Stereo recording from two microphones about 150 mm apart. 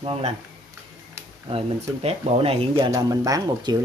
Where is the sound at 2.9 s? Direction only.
25° right (ahead or behind).